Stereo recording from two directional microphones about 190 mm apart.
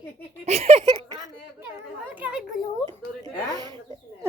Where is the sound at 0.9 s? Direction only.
20° right (ahead or behind).